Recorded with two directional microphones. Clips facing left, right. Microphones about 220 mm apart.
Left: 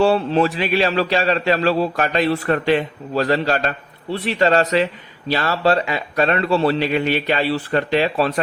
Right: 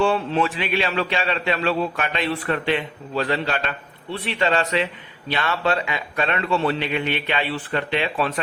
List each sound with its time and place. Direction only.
0.0 s a man's voice: 40° left (ahead or behind)